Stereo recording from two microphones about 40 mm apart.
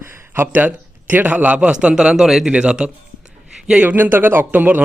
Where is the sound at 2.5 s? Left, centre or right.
Right.